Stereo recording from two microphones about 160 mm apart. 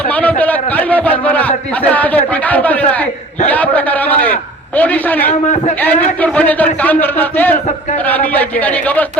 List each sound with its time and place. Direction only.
0.1 s a man's voice: 10° left (ahead or behind)
3.5 s a sound: 10° left (ahead or behind)
4.8 s a man's voice: 10° left (ahead or behind)
5.3 s a man's voice: 50° left (ahead or behind)
5.8 s a man's voice: 10° left (ahead or behind)